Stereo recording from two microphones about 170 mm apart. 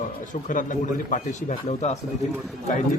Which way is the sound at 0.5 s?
50° left (ahead or behind).